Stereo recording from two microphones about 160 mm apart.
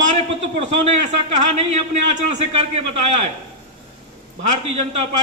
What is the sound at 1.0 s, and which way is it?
A man's voice, 45° right (ahead or behind).